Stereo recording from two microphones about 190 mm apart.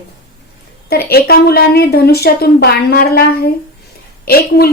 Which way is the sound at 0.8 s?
55° left (ahead or behind).